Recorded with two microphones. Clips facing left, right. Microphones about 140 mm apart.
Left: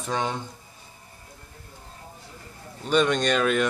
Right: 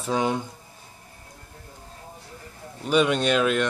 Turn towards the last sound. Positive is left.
turn(degrees=-5)  # may be behind; listen again after turning